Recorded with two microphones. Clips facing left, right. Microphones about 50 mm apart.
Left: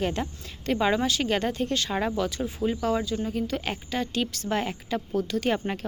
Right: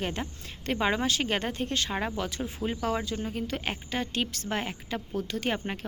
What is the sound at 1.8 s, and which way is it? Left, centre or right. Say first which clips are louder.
Speech: left 4 dB; centre.